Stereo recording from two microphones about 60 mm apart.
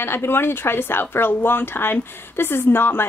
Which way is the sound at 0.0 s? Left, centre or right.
Left.